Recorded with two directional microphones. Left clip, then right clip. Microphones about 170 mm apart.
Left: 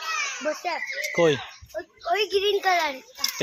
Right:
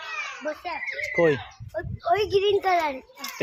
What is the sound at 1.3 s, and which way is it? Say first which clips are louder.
A child's voice: even; 30° right (ahead or behind).